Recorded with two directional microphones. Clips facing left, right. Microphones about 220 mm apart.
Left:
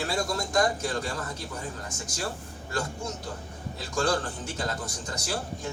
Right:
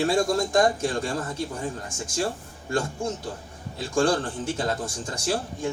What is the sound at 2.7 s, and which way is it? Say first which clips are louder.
Speech: right 6 dB; 25° right (ahead or behind).